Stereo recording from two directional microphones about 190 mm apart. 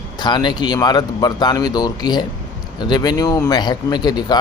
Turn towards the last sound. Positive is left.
turn(degrees=20)  # may be behind; listen again after turning